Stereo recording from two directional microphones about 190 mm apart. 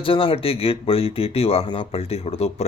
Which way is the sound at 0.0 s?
30° left (ahead or behind).